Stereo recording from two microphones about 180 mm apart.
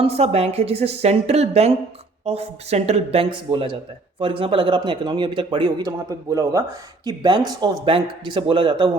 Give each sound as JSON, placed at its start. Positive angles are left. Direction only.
{"t": 0.0, "sound": "a woman's voice", "side_deg": -35}